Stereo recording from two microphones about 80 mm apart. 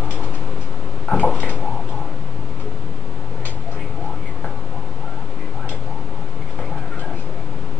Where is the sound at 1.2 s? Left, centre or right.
Centre.